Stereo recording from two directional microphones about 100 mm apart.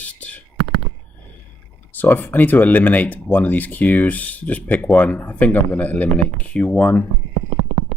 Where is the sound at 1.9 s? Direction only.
15° left (ahead or behind).